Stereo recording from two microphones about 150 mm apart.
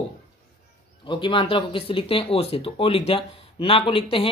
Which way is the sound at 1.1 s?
35° left (ahead or behind).